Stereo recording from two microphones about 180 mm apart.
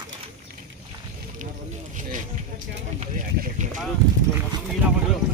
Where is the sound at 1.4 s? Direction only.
45° right (ahead or behind).